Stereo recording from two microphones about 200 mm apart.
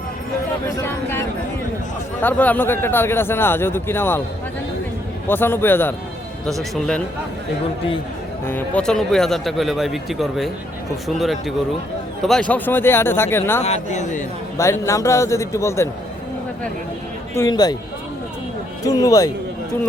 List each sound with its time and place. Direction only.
2.2 s speech: 10° left (ahead or behind)
5.3 s speech: 10° left (ahead or behind)
8.4 s speech: 10° left (ahead or behind)
13.6 s speech: 35° left (ahead or behind)
14.6 s speech: 15° left (ahead or behind)
17.3 s speech: 15° left (ahead or behind)
18.9 s speech: 15° left (ahead or behind)